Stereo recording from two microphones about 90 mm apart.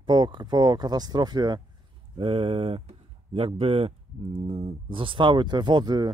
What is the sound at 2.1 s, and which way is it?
Speech, 90° right.